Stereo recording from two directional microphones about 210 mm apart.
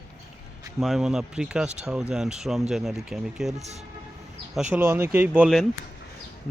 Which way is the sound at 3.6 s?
30° right (ahead or behind).